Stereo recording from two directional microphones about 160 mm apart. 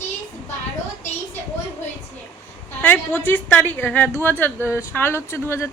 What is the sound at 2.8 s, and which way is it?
Speech, 10° left (ahead or behind).